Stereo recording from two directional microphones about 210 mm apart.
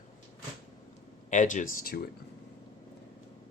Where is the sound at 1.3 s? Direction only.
35° left (ahead or behind).